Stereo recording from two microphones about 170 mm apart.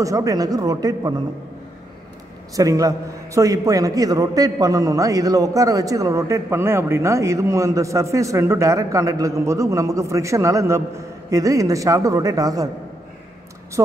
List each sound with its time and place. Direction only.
0.0 s a man's voice: 20° right (ahead or behind)
2.5 s a man's voice: 20° right (ahead or behind)
13.8 s a man's voice: 20° right (ahead or behind)